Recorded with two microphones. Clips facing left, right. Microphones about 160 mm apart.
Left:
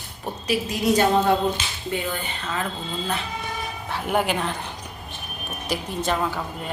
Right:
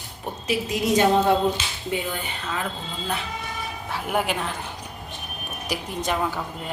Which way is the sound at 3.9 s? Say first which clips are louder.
Left 2 dB; 5° right (ahead or behind).